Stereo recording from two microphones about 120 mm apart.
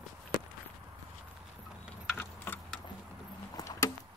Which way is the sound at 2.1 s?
20° left (ahead or behind).